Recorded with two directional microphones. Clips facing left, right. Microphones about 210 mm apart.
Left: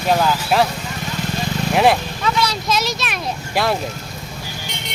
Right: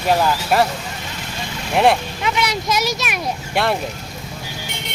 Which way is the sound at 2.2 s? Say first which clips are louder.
Left 1 dB; 20° right (ahead or behind).